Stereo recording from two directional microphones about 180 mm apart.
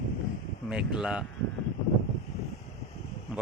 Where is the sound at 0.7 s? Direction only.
5° right (ahead or behind).